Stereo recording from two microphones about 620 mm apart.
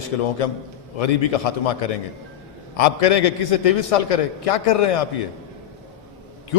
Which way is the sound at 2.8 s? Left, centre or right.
Left.